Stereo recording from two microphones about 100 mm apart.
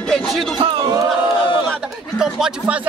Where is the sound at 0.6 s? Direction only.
65° right (ahead or behind).